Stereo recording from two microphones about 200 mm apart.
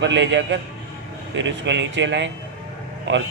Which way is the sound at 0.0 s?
65° right (ahead or behind).